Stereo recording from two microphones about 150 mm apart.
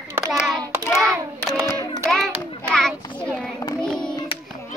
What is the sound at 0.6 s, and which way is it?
Hands, 20° right (ahead or behind).